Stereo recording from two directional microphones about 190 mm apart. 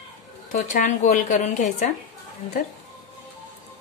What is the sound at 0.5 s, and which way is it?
A woman's voice, 40° left (ahead or behind).